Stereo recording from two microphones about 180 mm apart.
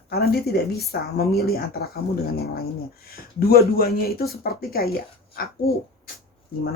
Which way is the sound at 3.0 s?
55° left (ahead or behind).